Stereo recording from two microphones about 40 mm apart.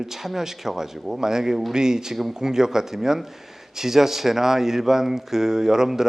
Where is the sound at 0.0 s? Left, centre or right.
Centre.